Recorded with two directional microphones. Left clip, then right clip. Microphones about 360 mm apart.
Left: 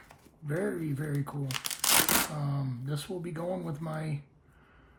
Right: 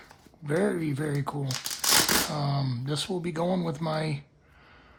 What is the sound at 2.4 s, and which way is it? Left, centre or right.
Speech, centre.